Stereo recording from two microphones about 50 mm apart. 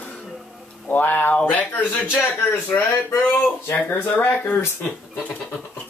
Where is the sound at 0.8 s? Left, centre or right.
Left.